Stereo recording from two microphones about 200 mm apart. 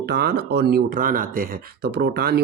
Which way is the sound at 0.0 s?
55° right (ahead or behind).